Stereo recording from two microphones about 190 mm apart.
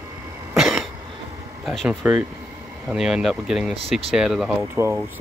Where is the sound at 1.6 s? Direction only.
Centre (ahead or behind).